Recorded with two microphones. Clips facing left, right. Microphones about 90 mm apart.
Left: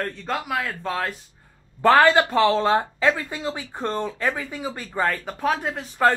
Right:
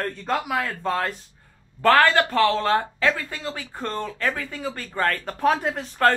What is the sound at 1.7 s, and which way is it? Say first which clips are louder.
Speech: left 2 dB; 15° left (ahead or behind).